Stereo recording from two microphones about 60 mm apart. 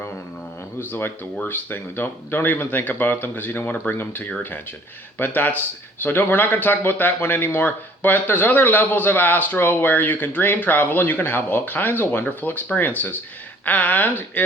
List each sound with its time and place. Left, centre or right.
0.9 s a man's voice: left